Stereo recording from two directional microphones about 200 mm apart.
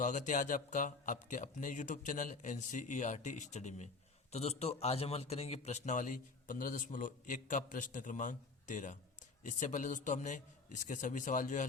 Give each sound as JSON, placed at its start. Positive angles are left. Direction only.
{"t": 0.0, "sound": "a man's voice", "side_deg": 40}